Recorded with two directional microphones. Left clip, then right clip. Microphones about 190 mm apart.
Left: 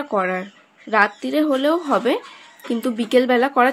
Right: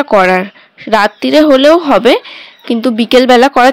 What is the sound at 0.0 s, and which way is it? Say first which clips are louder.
Speech: right 14 dB; 55° right (ahead or behind).